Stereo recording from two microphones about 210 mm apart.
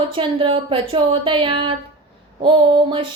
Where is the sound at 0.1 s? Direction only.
25° right (ahead or behind).